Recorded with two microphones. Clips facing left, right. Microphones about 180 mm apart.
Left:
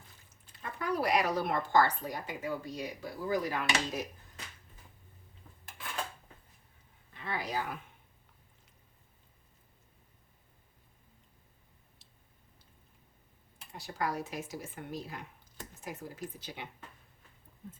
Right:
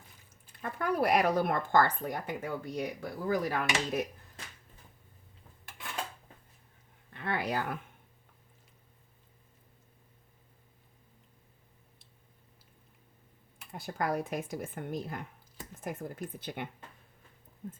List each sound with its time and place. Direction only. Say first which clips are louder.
0.6 s speech: right 3 dB; 55° right (ahead or behind)
7.1 s speech: right 4 dB; 60° right (ahead or behind)
13.7 s speech: right 3 dB; 55° right (ahead or behind)